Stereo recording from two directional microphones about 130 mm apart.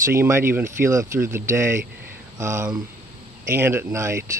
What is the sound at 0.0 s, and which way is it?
Speech, 20° right (ahead or behind).